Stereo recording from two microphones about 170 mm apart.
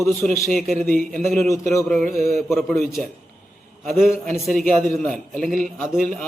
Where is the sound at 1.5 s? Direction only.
20° left (ahead or behind).